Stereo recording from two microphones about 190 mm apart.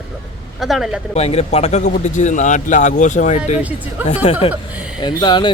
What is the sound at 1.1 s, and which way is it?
A man's voice, 35° left (ahead or behind).